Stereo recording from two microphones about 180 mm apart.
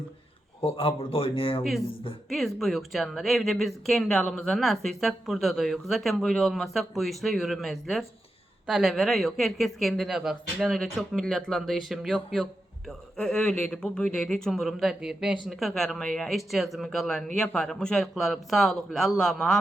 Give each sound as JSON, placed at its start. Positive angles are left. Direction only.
{"t": 0.6, "sound": "speech", "side_deg": 30}
{"t": 2.3, "sound": "speech", "side_deg": 0}